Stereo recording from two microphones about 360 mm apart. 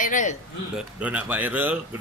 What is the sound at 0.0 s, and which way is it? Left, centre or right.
Speech, left.